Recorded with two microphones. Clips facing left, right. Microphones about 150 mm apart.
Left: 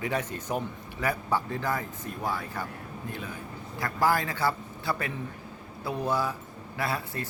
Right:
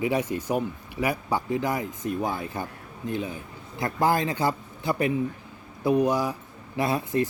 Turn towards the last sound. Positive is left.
turn(degrees=-20)  # may be behind; listen again after turning